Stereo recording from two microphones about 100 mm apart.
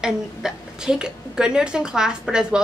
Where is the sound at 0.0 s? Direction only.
5° right (ahead or behind).